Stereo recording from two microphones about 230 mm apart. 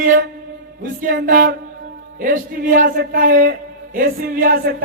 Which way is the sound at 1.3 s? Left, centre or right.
Right.